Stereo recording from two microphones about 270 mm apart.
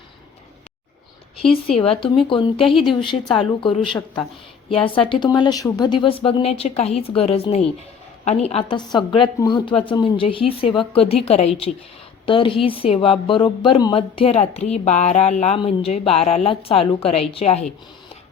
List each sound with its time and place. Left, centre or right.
1.8 s a woman's voice: centre
2.6 s a woman's voice: centre
2.8 s a woman's voice: centre